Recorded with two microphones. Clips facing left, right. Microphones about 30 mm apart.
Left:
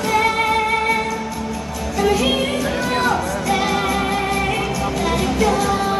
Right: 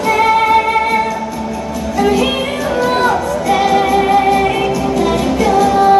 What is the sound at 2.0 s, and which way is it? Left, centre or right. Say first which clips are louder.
Music: right 2 dB; centre.